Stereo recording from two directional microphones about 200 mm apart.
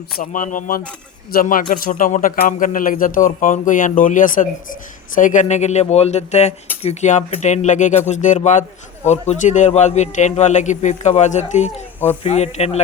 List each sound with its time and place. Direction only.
0.2 s a man's voice: 40° left (ahead or behind)